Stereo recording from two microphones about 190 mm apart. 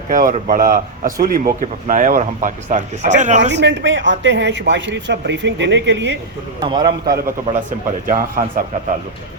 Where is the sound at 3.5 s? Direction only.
65° right (ahead or behind).